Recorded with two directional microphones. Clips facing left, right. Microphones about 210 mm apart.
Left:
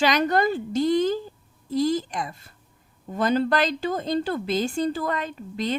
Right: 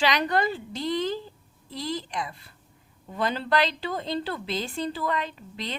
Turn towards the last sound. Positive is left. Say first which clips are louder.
# left 8 dB
turn(degrees=45)  # may be behind; listen again after turning